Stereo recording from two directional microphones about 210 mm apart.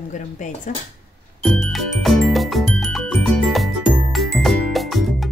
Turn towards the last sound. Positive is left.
turn(degrees=0)  # may be behind; listen again after turning